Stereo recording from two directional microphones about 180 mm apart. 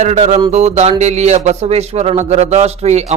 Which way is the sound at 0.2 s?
25° right (ahead or behind).